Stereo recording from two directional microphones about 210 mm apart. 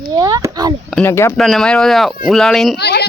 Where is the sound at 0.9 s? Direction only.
10° left (ahead or behind).